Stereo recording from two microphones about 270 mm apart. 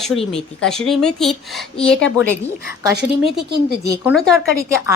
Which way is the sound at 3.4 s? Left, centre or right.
Right.